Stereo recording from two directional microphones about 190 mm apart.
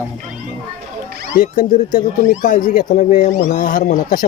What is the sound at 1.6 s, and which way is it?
Speech, 50° left (ahead or behind).